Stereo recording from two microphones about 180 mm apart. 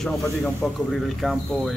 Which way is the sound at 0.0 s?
Centre (ahead or behind).